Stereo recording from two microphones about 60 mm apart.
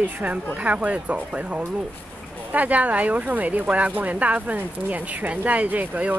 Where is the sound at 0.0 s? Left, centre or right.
Right.